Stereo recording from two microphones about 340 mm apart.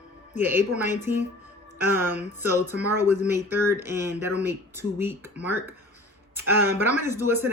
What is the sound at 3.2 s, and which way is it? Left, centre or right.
Speech, centre.